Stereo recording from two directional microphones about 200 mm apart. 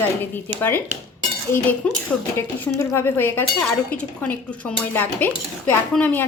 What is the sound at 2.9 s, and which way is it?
Speech, 10° left (ahead or behind).